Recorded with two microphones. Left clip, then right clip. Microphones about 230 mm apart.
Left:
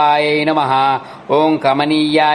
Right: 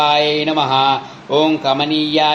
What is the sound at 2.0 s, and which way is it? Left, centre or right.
Music, centre.